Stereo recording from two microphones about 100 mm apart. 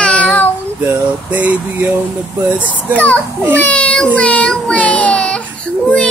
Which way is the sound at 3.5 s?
15° left (ahead or behind).